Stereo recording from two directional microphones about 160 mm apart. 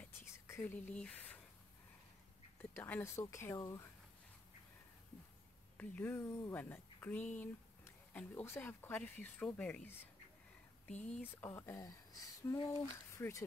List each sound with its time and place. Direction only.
0.0 s whispering: 15° left (ahead or behind)
2.7 s speech: 10° left (ahead or behind)
5.8 s speech: 10° left (ahead or behind)